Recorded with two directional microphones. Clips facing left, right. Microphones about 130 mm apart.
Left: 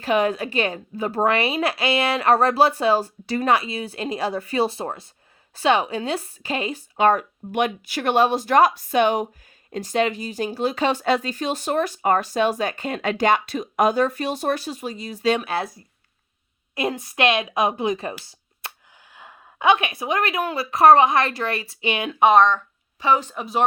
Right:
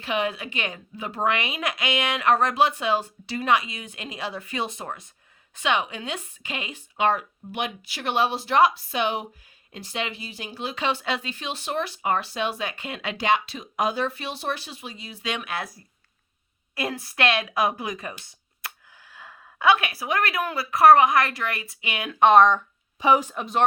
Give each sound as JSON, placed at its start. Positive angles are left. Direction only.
{"t": 0.0, "sound": "a woman's voice", "side_deg": 45}
{"t": 22.2, "sound": "speech", "side_deg": 0}
{"t": 22.4, "sound": "speech", "side_deg": -15}
{"t": 23.3, "sound": "speech", "side_deg": 0}